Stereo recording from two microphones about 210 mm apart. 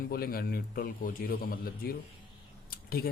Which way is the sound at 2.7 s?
45° left (ahead or behind).